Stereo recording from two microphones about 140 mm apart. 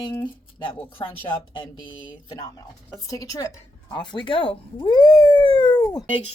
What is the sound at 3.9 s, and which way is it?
Speech, 35° left (ahead or behind).